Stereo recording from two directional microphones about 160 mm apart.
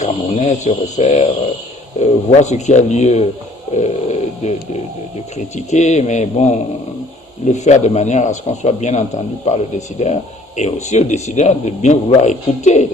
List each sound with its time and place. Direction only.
0.0 s speech: 45° left (ahead or behind)
3.8 s snoring: 45° left (ahead or behind)
5.5 s speech: 45° left (ahead or behind)